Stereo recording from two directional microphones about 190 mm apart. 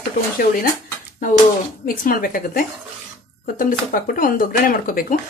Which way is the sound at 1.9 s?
50° left (ahead or behind).